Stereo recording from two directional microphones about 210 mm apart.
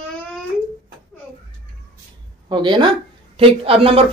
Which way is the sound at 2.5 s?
20° right (ahead or behind).